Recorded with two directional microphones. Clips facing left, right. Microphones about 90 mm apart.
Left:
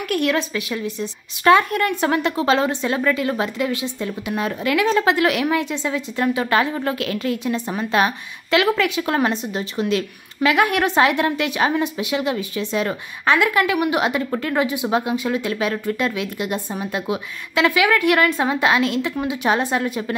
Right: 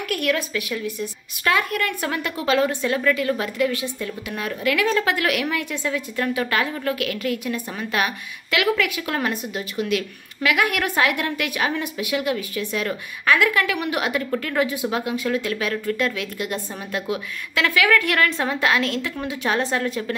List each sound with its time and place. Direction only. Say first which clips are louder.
0.1 s speech: left 3 dB; 25° left (ahead or behind)